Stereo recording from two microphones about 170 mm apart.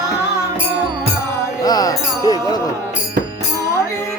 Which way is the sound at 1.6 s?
20° left (ahead or behind).